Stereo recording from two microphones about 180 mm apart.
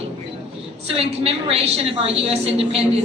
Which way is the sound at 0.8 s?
30° right (ahead or behind).